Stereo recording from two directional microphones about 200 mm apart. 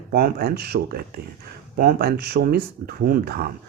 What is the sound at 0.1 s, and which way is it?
Speech, 50° right (ahead or behind).